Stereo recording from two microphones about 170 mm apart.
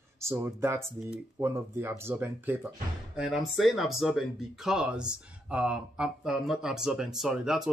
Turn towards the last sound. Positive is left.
turn(degrees=-5)  # may be behind; listen again after turning